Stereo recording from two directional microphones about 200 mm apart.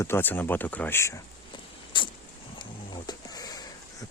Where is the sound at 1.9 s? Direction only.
25° left (ahead or behind).